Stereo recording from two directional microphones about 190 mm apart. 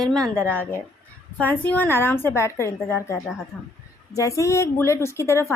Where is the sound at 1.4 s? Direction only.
10° left (ahead or behind).